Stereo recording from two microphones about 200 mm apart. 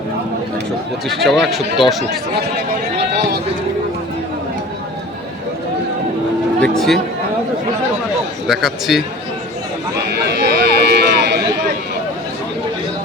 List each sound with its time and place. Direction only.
1.0 s speech: centre (ahead or behind)
6.6 s speech: centre (ahead or behind)
8.4 s speech: centre (ahead or behind)
10.2 s a sound: 55° right (ahead or behind)